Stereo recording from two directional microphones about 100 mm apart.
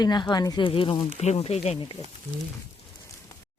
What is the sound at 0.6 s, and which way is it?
Speech, 60° left (ahead or behind).